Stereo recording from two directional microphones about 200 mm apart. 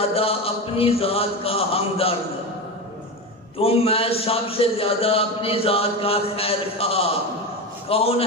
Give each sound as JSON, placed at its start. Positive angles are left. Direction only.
{"t": 0.1, "sound": "a man's voice", "side_deg": 30}
{"t": 3.5, "sound": "a man's voice", "side_deg": 30}